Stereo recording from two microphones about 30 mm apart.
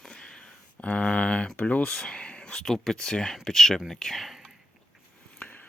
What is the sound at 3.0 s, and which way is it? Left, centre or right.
Speech, left.